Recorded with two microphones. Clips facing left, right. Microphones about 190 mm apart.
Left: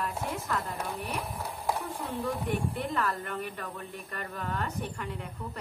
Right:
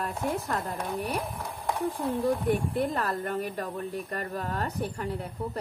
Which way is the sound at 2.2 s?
40° right (ahead or behind).